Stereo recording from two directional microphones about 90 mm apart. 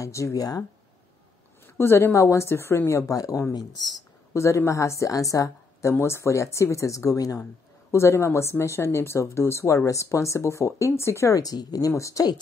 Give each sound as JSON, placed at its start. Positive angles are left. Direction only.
{"t": 0.0, "sound": "speech", "side_deg": 35}
{"t": 1.8, "sound": "speech", "side_deg": 25}
{"t": 3.5, "sound": "speech", "side_deg": 50}
{"t": 4.3, "sound": "speech", "side_deg": 30}